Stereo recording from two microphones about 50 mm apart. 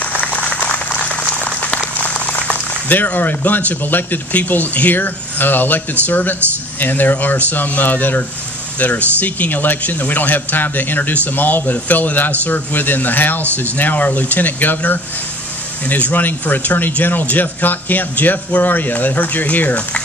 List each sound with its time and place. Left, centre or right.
0.2 s applause: left
2.2 s speech: left
15.9 s speech: left